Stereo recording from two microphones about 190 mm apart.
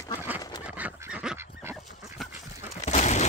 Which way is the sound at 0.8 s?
5° right (ahead or behind).